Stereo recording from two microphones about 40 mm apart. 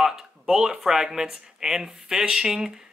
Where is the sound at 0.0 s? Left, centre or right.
Centre.